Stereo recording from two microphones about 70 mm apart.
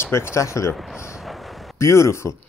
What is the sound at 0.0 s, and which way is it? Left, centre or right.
Speech, left.